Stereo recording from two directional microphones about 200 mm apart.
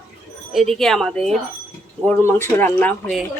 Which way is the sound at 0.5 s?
Centre (ahead or behind).